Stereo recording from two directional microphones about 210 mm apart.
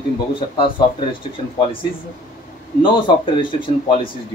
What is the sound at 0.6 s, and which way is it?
Speech, 25° left (ahead or behind).